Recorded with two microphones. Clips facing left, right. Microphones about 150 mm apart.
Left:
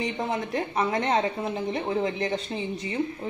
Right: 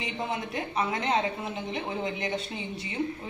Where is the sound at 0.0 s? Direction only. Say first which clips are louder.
Left 4 dB; 40° left (ahead or behind).